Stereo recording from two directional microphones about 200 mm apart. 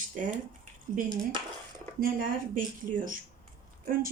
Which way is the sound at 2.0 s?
45° right (ahead or behind).